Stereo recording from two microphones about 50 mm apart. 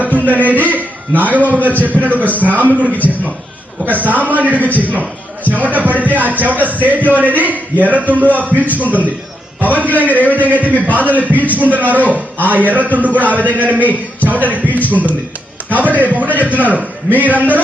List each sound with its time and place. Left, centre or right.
0.0 s music: right
0.5 s a sound: right
1.8 s a man's voice: right
4.0 s a man's voice: right
14.3 s music: right
14.5 s speech: left
14.8 s a man's voice: right